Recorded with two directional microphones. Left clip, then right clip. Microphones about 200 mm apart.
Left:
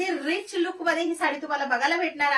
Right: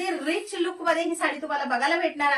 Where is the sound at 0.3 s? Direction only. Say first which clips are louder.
Even; 15° right (ahead or behind).